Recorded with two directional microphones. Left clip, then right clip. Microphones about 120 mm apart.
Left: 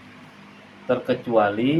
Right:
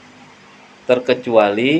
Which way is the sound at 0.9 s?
90° right.